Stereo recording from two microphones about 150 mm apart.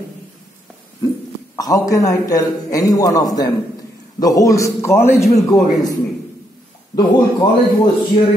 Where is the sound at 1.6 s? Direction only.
25° left (ahead or behind).